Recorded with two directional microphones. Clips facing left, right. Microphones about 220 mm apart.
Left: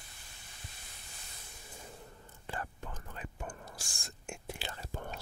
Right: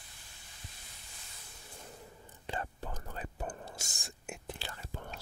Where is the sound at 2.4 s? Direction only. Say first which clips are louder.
Right 2 dB; 20° right (ahead or behind).